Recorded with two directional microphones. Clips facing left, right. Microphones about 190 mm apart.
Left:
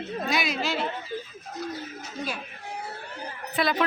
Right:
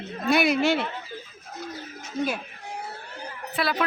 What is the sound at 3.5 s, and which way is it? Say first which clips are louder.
Speech: left 1 dB; centre (ahead or behind).